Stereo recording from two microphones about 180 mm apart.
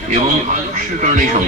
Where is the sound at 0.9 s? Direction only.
45° right (ahead or behind).